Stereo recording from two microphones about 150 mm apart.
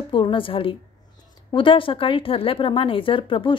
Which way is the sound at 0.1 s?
35° left (ahead or behind).